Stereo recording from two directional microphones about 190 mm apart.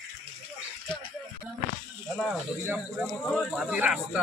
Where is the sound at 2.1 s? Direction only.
5° right (ahead or behind).